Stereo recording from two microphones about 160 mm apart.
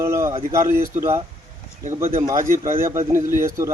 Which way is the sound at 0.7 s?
55° right (ahead or behind).